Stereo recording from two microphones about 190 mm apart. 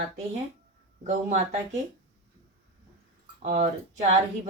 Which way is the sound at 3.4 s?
35° right (ahead or behind).